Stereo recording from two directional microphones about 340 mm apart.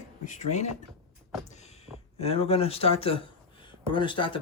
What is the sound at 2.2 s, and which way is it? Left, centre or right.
Speech, centre.